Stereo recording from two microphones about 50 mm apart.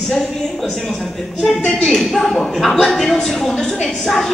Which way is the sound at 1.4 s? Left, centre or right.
Centre.